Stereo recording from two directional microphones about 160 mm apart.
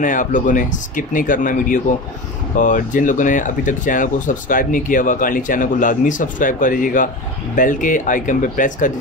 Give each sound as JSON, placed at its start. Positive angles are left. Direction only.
{"t": 0.0, "sound": "speech", "side_deg": 55}